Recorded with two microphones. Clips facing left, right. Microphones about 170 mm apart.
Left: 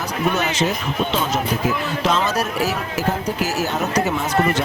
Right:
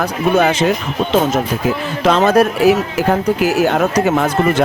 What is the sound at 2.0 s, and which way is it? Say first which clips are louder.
Speech: right 10 dB; 60° right (ahead or behind).